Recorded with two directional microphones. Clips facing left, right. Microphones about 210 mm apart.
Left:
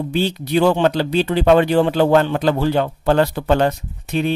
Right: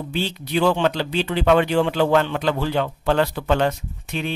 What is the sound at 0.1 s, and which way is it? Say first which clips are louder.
Speech: left 5 dB; 40° left (ahead or behind).